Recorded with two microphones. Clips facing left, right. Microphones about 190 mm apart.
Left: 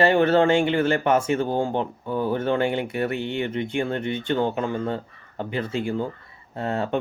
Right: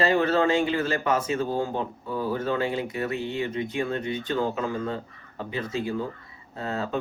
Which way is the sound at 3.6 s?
30° left (ahead or behind).